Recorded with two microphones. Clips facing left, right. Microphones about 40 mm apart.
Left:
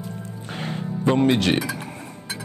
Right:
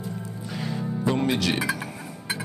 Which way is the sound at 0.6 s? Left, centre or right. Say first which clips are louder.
Left 1 dB; left.